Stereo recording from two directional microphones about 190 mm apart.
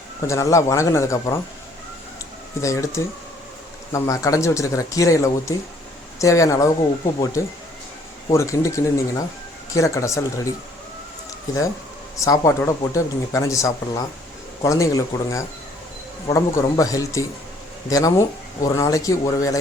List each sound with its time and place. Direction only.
0.3 s speech: 15° left (ahead or behind)
2.6 s speech: 15° left (ahead or behind)
8.3 s speech: 15° left (ahead or behind)